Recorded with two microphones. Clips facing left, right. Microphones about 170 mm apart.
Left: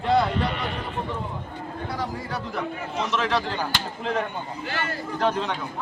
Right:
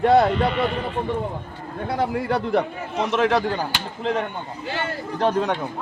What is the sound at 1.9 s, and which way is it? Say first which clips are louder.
A man's voice: right 10 dB; 60° right (ahead or behind).